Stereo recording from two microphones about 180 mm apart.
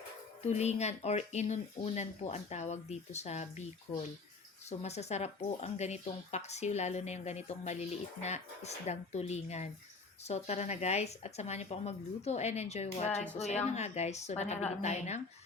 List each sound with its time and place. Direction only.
0.4 s speech: 40° left (ahead or behind)